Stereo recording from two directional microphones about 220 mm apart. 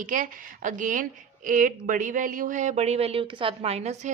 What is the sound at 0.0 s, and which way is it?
Speech, 35° right (ahead or behind).